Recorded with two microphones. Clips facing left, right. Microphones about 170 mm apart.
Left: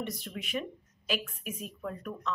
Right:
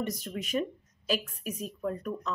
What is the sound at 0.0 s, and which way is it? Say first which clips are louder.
A woman's voice: right 4 dB; 40° right (ahead or behind).